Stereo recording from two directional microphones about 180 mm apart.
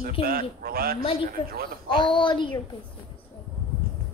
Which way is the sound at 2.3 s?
25° left (ahead or behind).